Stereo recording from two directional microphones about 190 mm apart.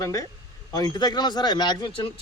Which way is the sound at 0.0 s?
20° left (ahead or behind).